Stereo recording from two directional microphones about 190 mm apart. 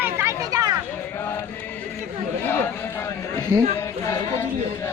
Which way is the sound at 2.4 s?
10° left (ahead or behind).